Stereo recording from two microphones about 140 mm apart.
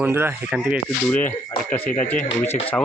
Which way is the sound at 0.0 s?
15° right (ahead or behind).